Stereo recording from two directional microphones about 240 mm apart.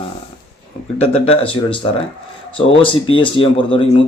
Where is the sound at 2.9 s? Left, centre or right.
Left.